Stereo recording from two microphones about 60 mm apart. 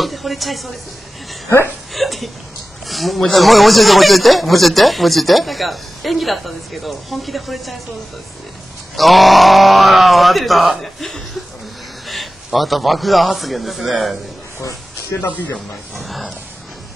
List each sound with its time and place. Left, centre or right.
0.0 s speech: centre
2.0 s speech: centre
8.9 s a man's voice: centre
15.1 s speech: left
16.0 s speech: centre